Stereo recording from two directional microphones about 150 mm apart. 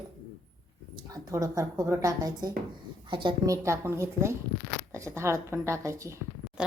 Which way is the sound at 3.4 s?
20° right (ahead or behind).